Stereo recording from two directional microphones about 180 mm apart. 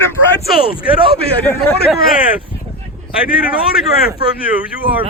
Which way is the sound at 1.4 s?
10° left (ahead or behind).